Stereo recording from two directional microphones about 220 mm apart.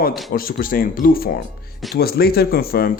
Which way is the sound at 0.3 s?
40° left (ahead or behind).